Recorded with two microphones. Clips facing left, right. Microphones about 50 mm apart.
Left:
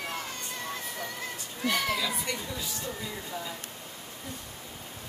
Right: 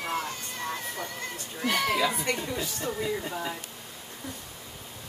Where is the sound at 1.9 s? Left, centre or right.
Right.